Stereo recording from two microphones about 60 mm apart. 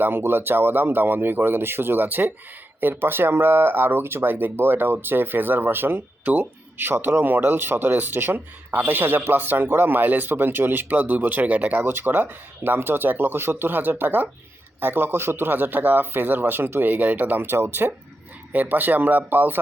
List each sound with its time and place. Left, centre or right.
0.0 s speech: right
18.5 s speech: right